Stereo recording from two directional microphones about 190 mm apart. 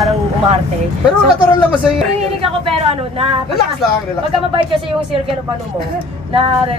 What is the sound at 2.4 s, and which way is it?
Speech, 30° right (ahead or behind).